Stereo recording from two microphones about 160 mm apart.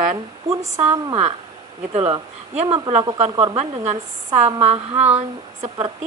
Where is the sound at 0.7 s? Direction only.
40° right (ahead or behind).